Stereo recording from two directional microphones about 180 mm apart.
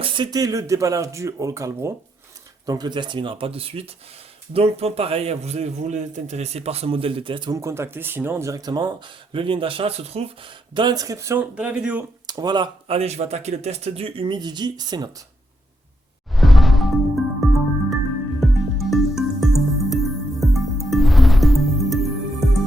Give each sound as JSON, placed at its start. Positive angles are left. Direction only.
{"t": 0.0, "sound": "a man's voice", "side_deg": -25}
{"t": 12.2, "sound": "speech", "side_deg": -20}
{"t": 16.3, "sound": "music", "side_deg": 0}